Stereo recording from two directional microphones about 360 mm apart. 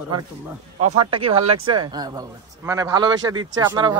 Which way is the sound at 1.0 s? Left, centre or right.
Centre.